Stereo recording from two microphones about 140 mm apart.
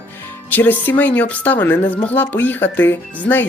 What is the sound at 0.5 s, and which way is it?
Speech, 10° left (ahead or behind).